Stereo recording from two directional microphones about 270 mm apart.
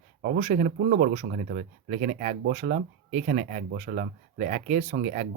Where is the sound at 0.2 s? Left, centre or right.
Right.